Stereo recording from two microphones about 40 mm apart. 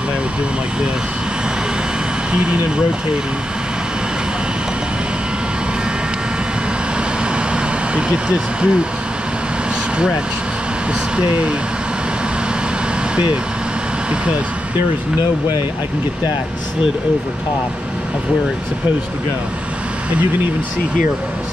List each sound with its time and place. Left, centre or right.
2.3 s speech: right
7.5 s vehicle: right
9.9 s speech: right
13.1 s speech: right